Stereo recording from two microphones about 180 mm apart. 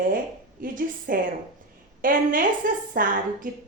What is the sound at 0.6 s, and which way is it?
A woman's voice, 50° right (ahead or behind).